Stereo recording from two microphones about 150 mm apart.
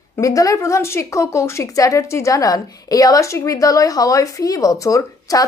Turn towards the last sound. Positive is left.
turn(degrees=25)  # may be behind; listen again after turning